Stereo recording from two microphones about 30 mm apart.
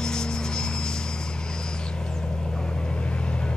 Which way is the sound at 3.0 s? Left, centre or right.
Left.